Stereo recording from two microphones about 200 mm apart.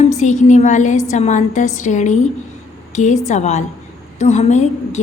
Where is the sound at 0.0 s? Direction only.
35° left (ahead or behind).